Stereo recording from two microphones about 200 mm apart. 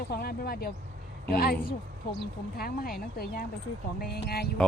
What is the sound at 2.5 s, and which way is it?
Speech, 50° left (ahead or behind).